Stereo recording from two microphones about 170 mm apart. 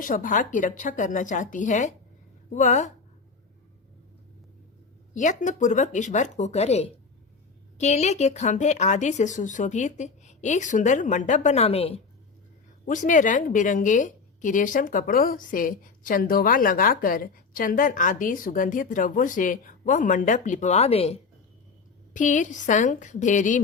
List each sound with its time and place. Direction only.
0.0 s a woman's voice: 50° left (ahead or behind)
5.1 s a woman's voice: 45° left (ahead or behind)
12.8 s a woman's voice: 50° left (ahead or behind)
22.1 s a woman's voice: 50° left (ahead or behind)